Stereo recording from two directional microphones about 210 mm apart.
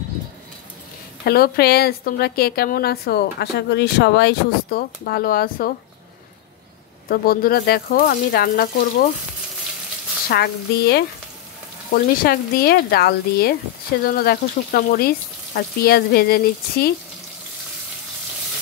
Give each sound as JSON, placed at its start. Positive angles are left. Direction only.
{"t": 1.2, "sound": "a woman's voice", "side_deg": 45}
{"t": 7.1, "sound": "a woman's voice", "side_deg": 45}
{"t": 10.3, "sound": "a woman's voice", "side_deg": 50}